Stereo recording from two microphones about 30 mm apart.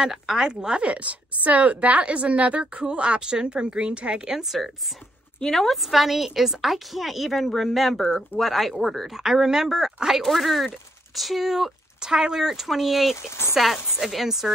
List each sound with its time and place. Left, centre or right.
0.1 s speech: centre
0.8 s a woman's voice: right
2.8 s a woman's voice: right
4.5 s a woman's voice: centre
5.8 s a woman's voice: centre
10.2 s a woman's voice: centre
12.0 s speech: right